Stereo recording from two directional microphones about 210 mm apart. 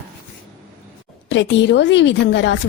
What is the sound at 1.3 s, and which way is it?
A woman's voice, 60° left (ahead or behind).